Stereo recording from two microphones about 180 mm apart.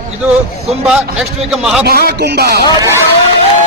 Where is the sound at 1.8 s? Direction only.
60° right (ahead or behind).